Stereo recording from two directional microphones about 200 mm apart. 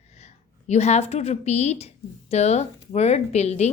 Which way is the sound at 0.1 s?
35° left (ahead or behind).